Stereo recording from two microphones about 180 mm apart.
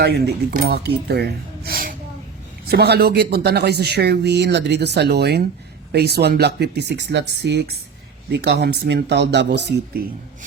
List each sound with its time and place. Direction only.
0.0 s speech: 65° right (ahead or behind)
2.6 s speech: 65° right (ahead or behind)